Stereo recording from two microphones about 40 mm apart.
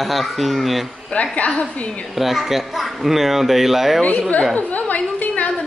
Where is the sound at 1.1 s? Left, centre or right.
Left.